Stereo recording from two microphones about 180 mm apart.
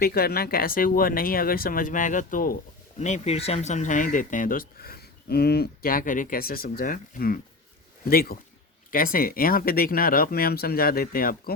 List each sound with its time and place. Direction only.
0.0 s speech: 60° left (ahead or behind)
3.0 s speech: 40° left (ahead or behind); by 11.5 s 55° left (ahead or behind)